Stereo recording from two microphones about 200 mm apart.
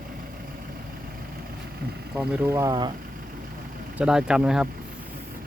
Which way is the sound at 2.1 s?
10° right (ahead or behind).